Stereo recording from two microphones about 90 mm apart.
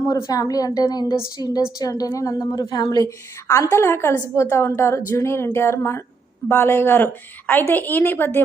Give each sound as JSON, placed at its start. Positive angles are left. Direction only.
{"t": 0.1, "sound": "a woman's voice", "side_deg": 40}
{"t": 3.4, "sound": "a woman's voice", "side_deg": 35}